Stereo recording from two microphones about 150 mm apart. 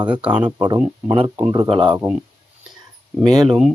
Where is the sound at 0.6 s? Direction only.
30° right (ahead or behind).